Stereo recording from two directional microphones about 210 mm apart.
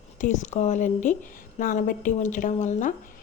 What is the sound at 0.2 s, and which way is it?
A woman's voice, 35° left (ahead or behind).